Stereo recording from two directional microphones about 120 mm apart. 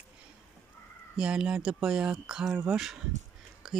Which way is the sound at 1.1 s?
5° right (ahead or behind).